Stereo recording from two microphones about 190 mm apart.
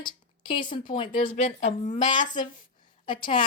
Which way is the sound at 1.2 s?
30° left (ahead or behind).